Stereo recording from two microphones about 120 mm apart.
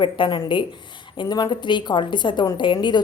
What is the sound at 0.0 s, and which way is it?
A woman's voice, 40° left (ahead or behind).